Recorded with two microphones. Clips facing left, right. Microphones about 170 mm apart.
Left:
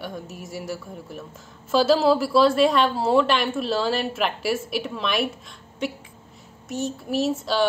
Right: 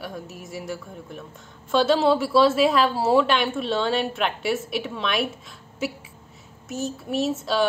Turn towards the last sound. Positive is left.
turn(degrees=0)  # may be behind; listen again after turning